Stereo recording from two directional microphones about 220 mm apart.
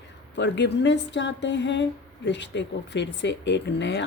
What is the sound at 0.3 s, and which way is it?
A woman's voice, 55° left (ahead or behind).